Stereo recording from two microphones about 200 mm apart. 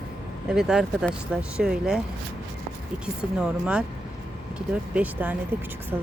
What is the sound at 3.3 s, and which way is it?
Speech, 5° right (ahead or behind).